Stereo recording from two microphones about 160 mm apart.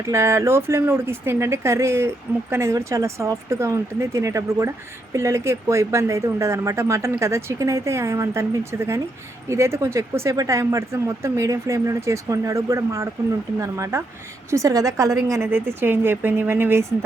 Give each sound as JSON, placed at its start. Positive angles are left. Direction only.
{"t": 0.0, "sound": "speech", "side_deg": -20}